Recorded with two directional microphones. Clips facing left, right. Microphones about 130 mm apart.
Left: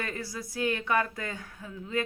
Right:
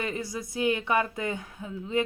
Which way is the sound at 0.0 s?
20° right (ahead or behind).